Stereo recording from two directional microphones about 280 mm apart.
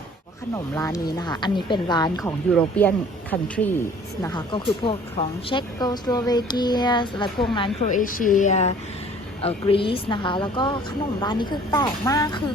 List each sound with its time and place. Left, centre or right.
0.5 s a woman's voice: centre